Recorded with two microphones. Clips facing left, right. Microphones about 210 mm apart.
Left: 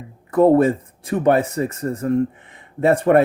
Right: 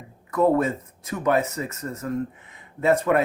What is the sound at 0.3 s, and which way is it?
Speech, 30° left (ahead or behind).